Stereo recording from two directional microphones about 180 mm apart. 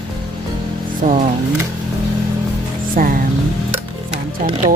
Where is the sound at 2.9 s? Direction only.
50° right (ahead or behind).